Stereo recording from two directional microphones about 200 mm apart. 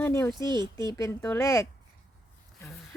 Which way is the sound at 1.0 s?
15° left (ahead or behind).